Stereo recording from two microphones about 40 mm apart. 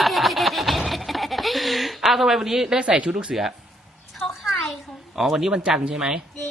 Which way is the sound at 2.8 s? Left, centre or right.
Right.